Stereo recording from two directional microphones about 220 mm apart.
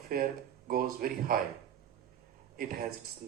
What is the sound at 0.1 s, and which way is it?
Speech, 40° right (ahead or behind).